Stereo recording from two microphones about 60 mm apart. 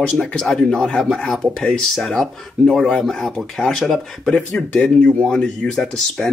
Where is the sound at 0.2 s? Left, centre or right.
Centre.